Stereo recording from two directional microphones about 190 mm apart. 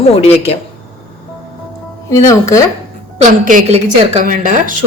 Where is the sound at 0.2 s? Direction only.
30° left (ahead or behind).